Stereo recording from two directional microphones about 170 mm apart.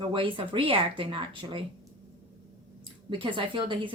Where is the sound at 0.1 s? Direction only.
30° right (ahead or behind).